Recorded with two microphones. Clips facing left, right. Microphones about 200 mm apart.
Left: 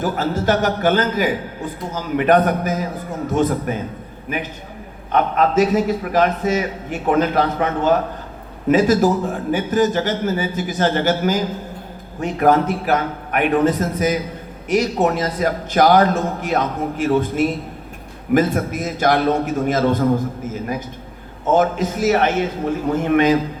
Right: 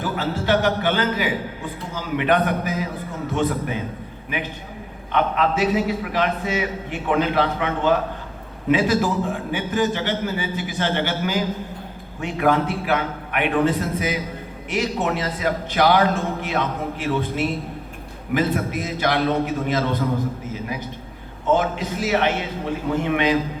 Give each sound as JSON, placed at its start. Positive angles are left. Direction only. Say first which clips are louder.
{"t": 0.0, "sound": "a man's voice", "louder": "left 5 dB", "side_deg": 45}